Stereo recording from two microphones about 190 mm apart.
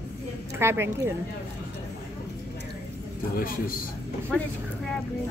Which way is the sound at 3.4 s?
50° left (ahead or behind).